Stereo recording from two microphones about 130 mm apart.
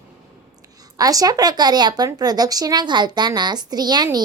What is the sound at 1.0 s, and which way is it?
Speech, 30° right (ahead or behind).